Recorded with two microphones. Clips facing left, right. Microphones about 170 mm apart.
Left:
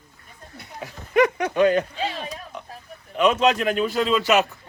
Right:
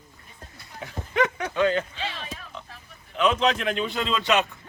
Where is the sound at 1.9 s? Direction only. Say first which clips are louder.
Left 6 dB; 40° left (ahead or behind).